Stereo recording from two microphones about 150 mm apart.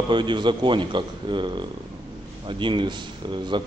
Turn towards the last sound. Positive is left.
turn(degrees=-30)  # may be behind; listen again after turning